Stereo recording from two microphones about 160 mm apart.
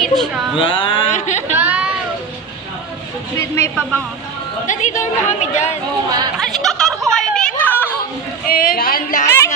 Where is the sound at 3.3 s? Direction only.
15° left (ahead or behind).